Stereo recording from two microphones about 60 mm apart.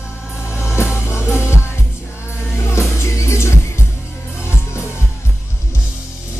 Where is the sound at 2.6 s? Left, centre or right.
Left.